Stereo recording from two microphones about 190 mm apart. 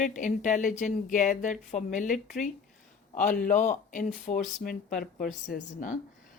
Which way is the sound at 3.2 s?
45° left (ahead or behind).